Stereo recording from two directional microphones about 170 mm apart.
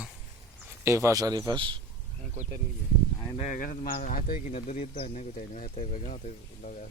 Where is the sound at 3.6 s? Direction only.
55° left (ahead or behind).